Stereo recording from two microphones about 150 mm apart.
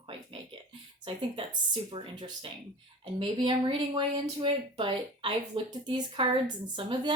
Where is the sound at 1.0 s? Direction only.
35° right (ahead or behind).